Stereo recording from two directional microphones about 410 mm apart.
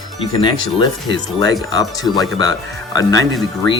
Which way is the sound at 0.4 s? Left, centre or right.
Centre.